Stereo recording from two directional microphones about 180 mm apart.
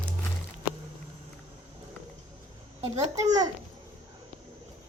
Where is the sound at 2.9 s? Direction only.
20° right (ahead or behind).